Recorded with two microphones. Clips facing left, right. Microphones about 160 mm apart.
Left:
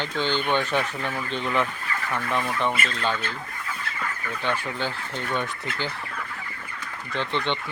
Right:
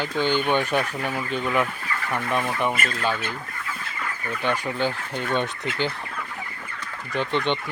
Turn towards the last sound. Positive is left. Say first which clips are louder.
# right 3 dB
turn(degrees=-15)  # may be behind; listen again after turning